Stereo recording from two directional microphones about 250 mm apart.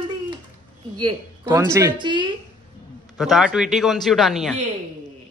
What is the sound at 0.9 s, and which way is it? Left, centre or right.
Speech, centre.